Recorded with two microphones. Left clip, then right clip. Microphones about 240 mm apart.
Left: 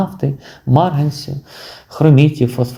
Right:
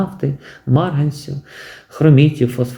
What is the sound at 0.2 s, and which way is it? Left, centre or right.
Speech, centre.